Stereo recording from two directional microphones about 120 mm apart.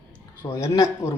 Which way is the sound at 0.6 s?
25° left (ahead or behind).